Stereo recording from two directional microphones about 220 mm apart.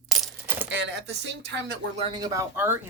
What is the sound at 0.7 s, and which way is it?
Speech, 50° right (ahead or behind).